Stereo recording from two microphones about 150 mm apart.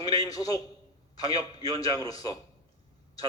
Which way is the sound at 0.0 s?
25° left (ahead or behind).